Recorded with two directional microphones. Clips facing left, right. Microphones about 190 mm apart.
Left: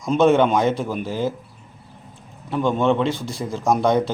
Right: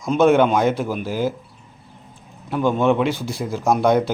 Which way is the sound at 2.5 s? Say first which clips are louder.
Right 1 dB; 5° right (ahead or behind).